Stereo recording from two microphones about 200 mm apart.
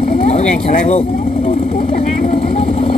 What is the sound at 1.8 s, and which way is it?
Vehicle, 30° left (ahead or behind).